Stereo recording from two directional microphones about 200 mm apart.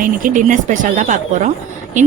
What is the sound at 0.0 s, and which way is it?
A woman's voice, 40° right (ahead or behind).